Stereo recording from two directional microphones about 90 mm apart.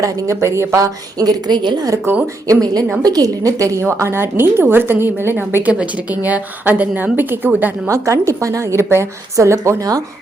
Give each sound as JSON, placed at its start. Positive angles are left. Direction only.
{"t": 0.0, "sound": "a woman's voice", "side_deg": -35}
{"t": 2.2, "sound": "a woman's voice", "side_deg": -40}
{"t": 7.9, "sound": "a woman's voice", "side_deg": -35}